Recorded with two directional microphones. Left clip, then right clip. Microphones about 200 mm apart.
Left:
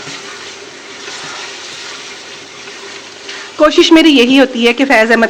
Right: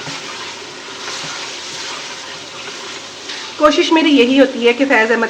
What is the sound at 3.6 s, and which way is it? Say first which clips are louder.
Speech: left 4 dB; 45° left (ahead or behind).